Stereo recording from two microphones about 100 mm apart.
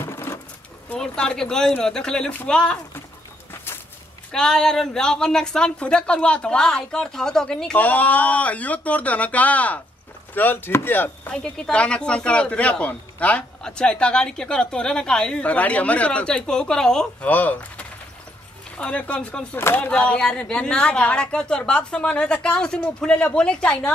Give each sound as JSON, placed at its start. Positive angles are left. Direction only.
{"t": 0.0, "sound": "sewing machine", "side_deg": 25}
{"t": 0.8, "sound": "speech", "side_deg": 10}
{"t": 4.3, "sound": "speech", "side_deg": 5}